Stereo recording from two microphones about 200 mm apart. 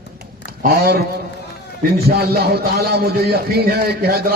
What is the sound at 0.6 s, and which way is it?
Speech, 50° right (ahead or behind).